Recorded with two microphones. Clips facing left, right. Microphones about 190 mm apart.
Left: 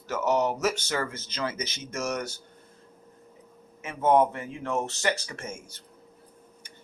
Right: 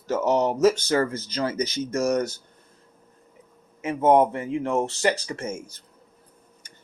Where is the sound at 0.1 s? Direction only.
35° right (ahead or behind).